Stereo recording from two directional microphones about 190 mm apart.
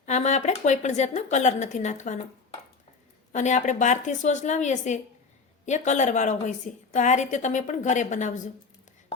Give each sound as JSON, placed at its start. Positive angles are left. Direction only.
{"t": 0.0, "sound": "a woman's voice", "side_deg": 40}
{"t": 3.3, "sound": "a woman's voice", "side_deg": 40}